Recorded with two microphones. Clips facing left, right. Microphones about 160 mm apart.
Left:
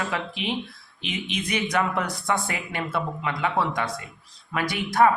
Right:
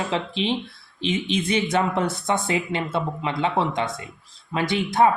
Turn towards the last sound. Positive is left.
turn(degrees=-25)  # may be behind; listen again after turning